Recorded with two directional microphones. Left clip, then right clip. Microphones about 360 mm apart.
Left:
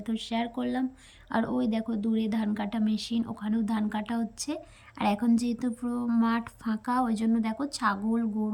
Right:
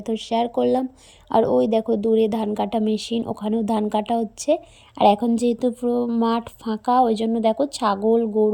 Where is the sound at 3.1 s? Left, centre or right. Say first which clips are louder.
Right 8 dB; centre.